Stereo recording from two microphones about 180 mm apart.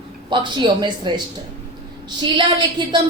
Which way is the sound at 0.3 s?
25° right (ahead or behind).